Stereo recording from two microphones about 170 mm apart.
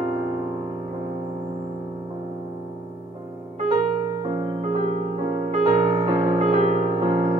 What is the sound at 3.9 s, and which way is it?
Music, 25° right (ahead or behind).